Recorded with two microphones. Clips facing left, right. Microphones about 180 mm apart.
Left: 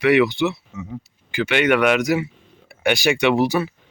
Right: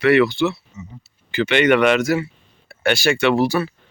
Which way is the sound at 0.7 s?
90° left.